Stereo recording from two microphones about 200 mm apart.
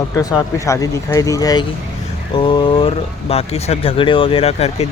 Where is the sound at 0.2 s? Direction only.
15° left (ahead or behind).